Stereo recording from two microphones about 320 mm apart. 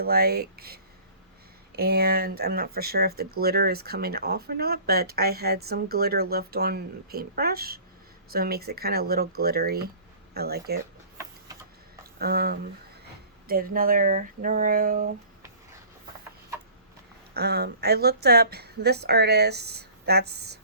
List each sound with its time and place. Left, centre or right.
0.0 s speech: right
12.2 s speech: right
17.3 s a woman's voice: right